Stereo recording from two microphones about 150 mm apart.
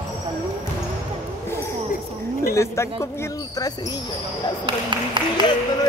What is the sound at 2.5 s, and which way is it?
Speech, 20° left (ahead or behind).